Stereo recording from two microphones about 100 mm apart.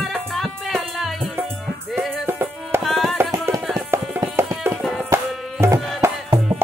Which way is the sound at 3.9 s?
20° right (ahead or behind).